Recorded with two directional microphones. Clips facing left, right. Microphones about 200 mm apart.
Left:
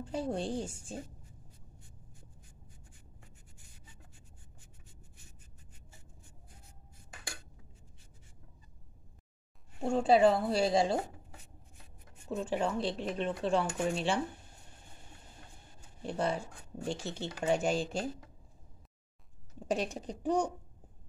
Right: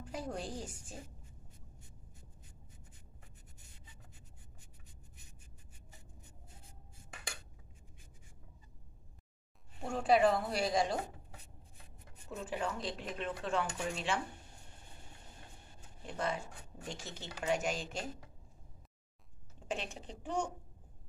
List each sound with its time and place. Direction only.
0.0 s speech: 30° left (ahead or behind)
9.8 s speech: 25° left (ahead or behind)
12.3 s speech: 30° left (ahead or behind)
16.1 s speech: 30° left (ahead or behind)
19.7 s speech: 40° left (ahead or behind)